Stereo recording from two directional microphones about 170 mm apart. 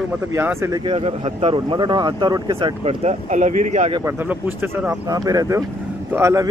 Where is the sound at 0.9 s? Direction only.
35° right (ahead or behind).